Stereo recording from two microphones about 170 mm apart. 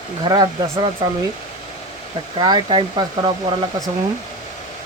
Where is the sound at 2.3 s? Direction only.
25° right (ahead or behind).